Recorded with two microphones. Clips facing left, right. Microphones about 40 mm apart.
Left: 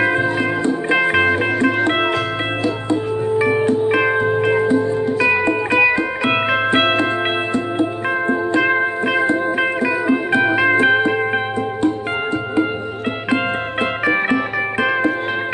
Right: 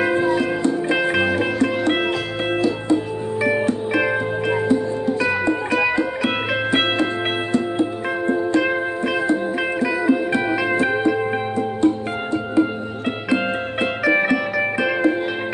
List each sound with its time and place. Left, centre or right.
0.0 s music: left
1.5 s music: left
1.9 s music: left
5.2 s music: left
13.3 s music: left